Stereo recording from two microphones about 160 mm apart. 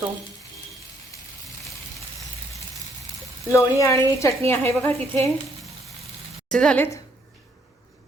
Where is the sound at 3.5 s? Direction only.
20° left (ahead or behind).